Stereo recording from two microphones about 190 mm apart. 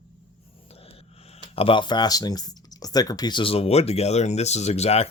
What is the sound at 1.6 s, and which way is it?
Speech, 25° left (ahead or behind).